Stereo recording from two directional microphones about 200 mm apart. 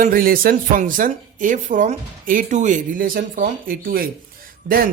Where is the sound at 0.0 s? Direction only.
45° right (ahead or behind).